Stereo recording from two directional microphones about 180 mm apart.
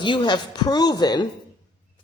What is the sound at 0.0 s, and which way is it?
A man's voice, 25° left (ahead or behind).